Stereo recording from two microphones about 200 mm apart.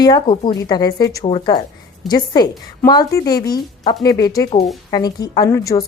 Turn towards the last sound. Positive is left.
turn(degrees=15)  # may be behind; listen again after turning